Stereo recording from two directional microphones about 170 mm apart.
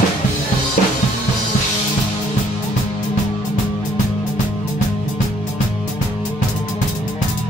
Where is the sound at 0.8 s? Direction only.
50° left (ahead or behind).